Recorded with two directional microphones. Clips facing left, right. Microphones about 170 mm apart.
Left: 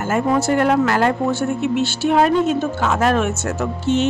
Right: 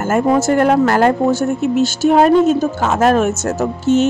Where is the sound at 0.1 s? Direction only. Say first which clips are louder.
Right 4 dB; 45° right (ahead or behind).